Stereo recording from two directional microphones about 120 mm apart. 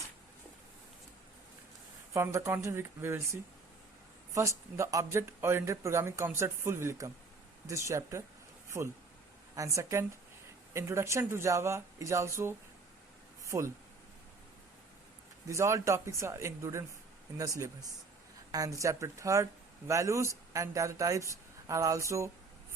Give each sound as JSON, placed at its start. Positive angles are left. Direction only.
{"t": 2.1, "sound": "speech", "side_deg": -25}
{"t": 13.4, "sound": "a sound", "side_deg": -25}
{"t": 15.4, "sound": "speech", "side_deg": -25}